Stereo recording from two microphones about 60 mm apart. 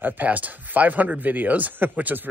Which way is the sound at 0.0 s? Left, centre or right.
Right.